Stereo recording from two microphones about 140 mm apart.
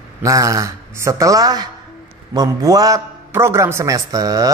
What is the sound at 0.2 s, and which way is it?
A man's voice, 25° right (ahead or behind).